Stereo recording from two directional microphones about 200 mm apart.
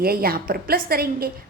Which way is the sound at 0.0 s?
50° right (ahead or behind).